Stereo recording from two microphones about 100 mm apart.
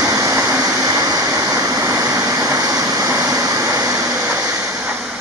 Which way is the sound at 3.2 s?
35° right (ahead or behind).